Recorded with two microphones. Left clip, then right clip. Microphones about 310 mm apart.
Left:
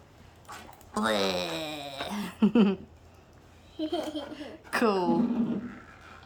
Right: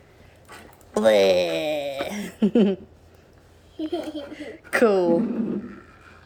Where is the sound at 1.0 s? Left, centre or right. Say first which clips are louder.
Right 11 dB; centre.